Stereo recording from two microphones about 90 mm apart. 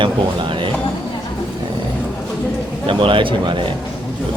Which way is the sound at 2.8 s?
70° right (ahead or behind).